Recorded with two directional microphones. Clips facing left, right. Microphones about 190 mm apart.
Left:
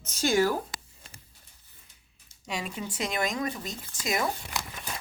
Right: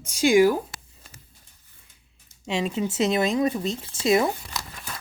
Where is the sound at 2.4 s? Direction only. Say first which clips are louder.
Right 9 dB; 25° right (ahead or behind).